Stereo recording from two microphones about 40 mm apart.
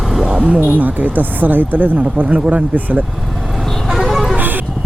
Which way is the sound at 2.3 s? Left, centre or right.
Right.